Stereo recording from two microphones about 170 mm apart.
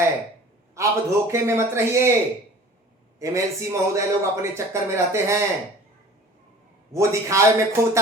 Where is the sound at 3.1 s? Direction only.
20° right (ahead or behind).